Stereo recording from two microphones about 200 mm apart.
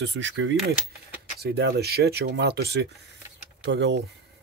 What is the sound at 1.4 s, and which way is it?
Speech, 55° right (ahead or behind).